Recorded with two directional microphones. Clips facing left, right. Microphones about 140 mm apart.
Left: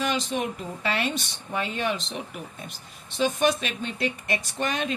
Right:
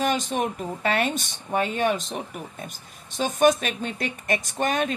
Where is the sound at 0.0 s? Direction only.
45° right (ahead or behind).